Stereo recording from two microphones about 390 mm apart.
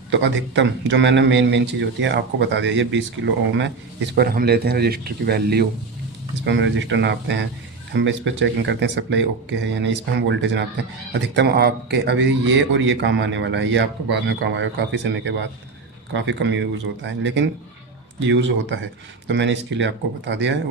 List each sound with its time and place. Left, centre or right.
0.1 s a man's voice: right